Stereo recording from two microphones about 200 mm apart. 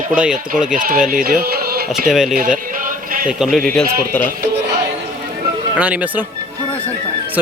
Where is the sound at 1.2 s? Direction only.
50° right (ahead or behind).